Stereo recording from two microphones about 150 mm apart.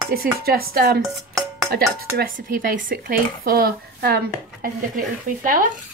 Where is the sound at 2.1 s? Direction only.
75° right (ahead or behind).